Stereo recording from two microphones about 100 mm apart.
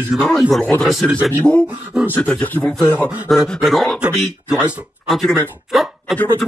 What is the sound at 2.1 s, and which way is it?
Speech, 15° left (ahead or behind).